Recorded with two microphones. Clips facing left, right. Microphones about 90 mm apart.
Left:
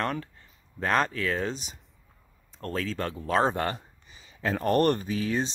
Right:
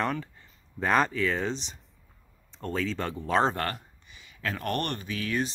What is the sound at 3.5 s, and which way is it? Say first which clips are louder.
Speech: left 2 dB; 15° left (ahead or behind).